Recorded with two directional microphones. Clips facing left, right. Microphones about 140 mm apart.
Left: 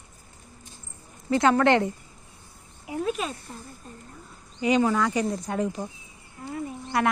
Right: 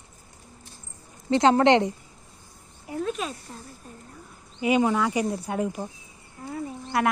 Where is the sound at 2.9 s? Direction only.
5° left (ahead or behind).